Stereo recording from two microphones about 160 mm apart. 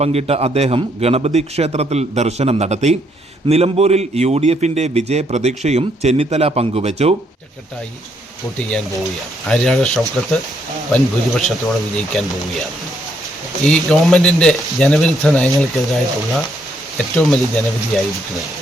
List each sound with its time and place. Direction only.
0.0 s a man's voice: 40° right (ahead or behind)
8.5 s speech: 5° left (ahead or behind)
13.7 s speech: centre (ahead or behind)